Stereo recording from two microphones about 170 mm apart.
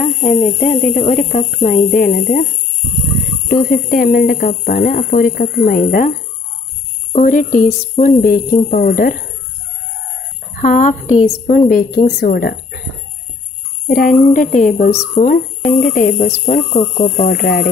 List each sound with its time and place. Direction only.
0.0 s speech: 50° left (ahead or behind)
3.4 s speech: 60° left (ahead or behind)
10.6 s speech: 45° left (ahead or behind)
11.4 s speech: 55° left (ahead or behind)
13.8 s speech: 55° left (ahead or behind)
17.4 s speech: 65° left (ahead or behind)